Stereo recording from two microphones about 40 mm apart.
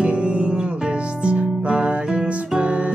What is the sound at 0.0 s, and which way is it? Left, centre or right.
Music, right.